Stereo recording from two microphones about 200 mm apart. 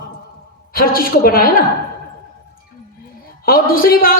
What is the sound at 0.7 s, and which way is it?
Speech, 50° left (ahead or behind).